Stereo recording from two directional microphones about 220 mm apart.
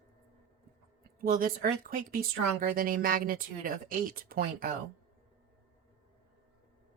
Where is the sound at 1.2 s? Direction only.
40° right (ahead or behind).